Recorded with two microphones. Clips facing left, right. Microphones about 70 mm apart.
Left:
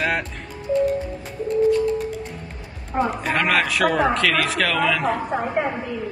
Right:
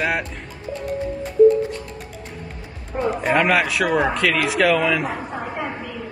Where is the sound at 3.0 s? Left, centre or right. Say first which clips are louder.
Right 7 dB; centre.